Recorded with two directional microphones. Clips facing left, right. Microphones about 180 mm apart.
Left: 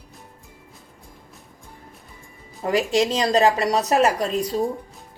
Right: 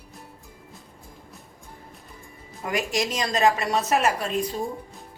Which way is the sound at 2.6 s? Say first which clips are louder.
Left 6 dB; 30° left (ahead or behind).